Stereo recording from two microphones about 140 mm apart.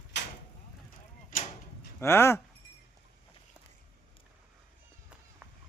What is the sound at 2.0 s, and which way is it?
Speech, 20° left (ahead or behind).